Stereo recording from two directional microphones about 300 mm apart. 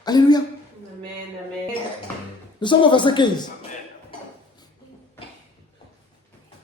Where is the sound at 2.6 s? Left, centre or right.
Centre.